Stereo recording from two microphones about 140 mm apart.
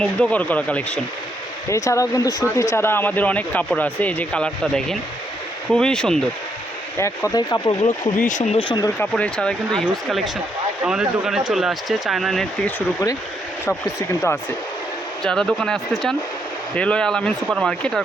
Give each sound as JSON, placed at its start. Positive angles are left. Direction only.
{"t": 0.0, "sound": "speech", "side_deg": 10}
{"t": 1.7, "sound": "speech", "side_deg": 20}
{"t": 7.0, "sound": "speech", "side_deg": 20}
{"t": 9.0, "sound": "speech", "side_deg": 10}
{"t": 13.7, "sound": "speech", "side_deg": 20}
{"t": 15.2, "sound": "speech", "side_deg": 5}